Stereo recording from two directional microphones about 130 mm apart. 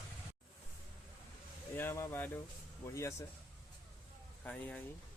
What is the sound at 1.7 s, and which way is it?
Speech, 20° left (ahead or behind).